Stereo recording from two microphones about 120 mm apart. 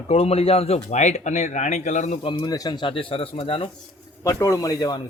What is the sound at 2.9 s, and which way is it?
Speech, 50° left (ahead or behind).